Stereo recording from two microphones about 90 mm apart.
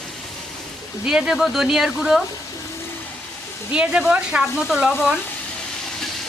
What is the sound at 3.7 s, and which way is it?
Speech, 10° right (ahead or behind).